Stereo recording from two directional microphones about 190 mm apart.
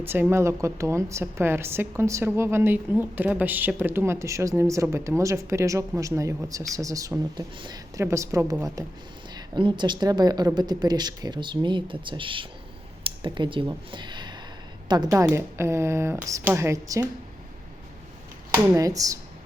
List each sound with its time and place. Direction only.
0.0 s a woman's voice: 10° right (ahead or behind)
18.5 s a woman's voice: 15° right (ahead or behind)